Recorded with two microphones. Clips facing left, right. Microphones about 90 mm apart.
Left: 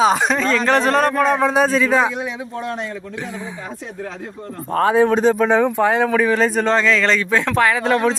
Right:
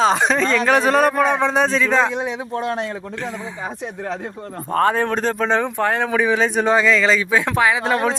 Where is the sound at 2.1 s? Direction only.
30° right (ahead or behind).